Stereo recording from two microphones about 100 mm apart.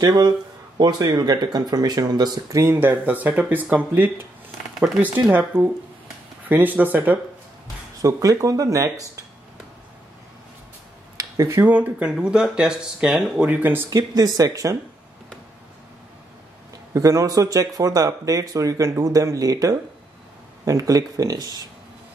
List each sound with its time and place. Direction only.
0.0 s speech: 45° right (ahead or behind)
2.6 s speech: 20° right (ahead or behind)
4.8 s speech: 5° right (ahead or behind)
5.2 s speech: 15° right (ahead or behind)
8.0 s a man's voice: 35° right (ahead or behind)
11.1 s a sound: 30° right (ahead or behind)
11.6 s speech: 15° right (ahead or behind)
13.8 s a man's voice: 35° right (ahead or behind)
16.9 s a man's voice: 30° right (ahead or behind)